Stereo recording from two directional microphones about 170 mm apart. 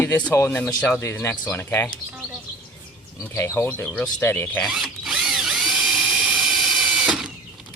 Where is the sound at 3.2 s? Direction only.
10° left (ahead or behind).